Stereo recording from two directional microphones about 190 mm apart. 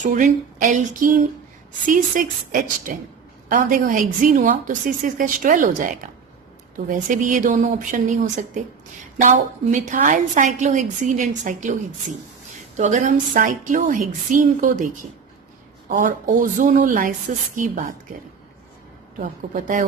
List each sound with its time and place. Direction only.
0.0 s a woman's voice: 40° right (ahead or behind)
15.9 s a woman's voice: 45° right (ahead or behind)
19.2 s a woman's voice: 45° right (ahead or behind)